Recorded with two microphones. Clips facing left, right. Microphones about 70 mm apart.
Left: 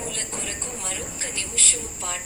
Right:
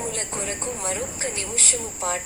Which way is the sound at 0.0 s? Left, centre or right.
Right.